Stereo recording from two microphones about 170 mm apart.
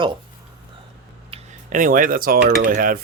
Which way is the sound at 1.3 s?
35° right (ahead or behind).